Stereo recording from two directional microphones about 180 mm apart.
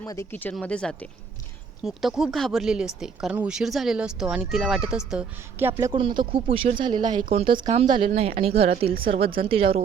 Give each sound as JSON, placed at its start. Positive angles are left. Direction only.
{"t": 0.0, "sound": "speech", "side_deg": 15}
{"t": 5.9, "sound": "speech", "side_deg": -25}
{"t": 8.9, "sound": "a woman's voice", "side_deg": -55}
{"t": 9.5, "sound": "speech", "side_deg": -30}